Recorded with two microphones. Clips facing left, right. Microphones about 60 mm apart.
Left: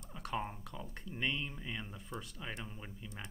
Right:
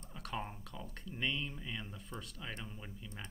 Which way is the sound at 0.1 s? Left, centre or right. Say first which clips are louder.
Left 3 dB; centre.